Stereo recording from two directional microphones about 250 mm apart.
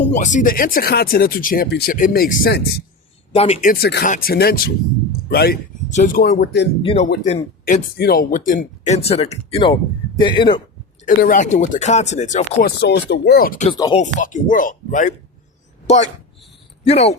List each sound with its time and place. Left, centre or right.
0.1 s speech: left
3.3 s speech: left
6.8 s speech: left
7.6 s speech: left; by 10.6 s centre
11.0 s speech: left
12.8 s speech: left
13.7 s speech: centre
14.0 s speech: left
16.8 s speech: left